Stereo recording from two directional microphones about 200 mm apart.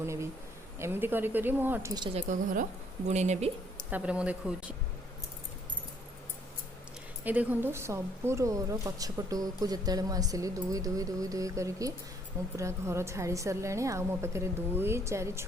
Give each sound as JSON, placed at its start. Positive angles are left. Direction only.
{"t": 0.0, "sound": "a woman's voice", "side_deg": -15}
{"t": 3.1, "sound": "speech", "side_deg": -35}
{"t": 3.8, "sound": "speech", "side_deg": -5}
{"t": 7.3, "sound": "a woman's voice", "side_deg": -10}